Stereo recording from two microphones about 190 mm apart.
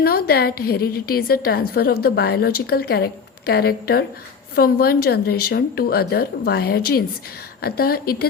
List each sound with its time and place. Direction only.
0.0 s a woman's voice: 55° left (ahead or behind)